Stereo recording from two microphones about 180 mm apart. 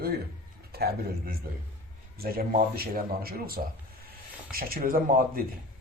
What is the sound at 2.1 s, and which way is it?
Speech, 55° right (ahead or behind).